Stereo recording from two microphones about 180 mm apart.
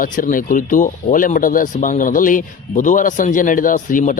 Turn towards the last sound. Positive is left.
turn(degrees=45)  # may be behind; listen again after turning